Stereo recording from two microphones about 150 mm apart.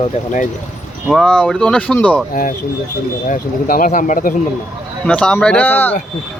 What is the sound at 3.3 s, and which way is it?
Speech, 70° left (ahead or behind).